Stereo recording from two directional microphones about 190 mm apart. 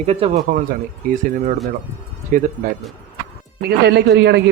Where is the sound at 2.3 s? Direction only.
45° right (ahead or behind).